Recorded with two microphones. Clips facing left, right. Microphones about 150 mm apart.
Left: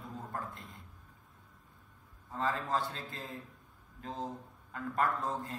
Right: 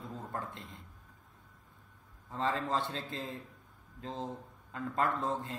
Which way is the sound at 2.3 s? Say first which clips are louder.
Right 1 dB; 25° right (ahead or behind).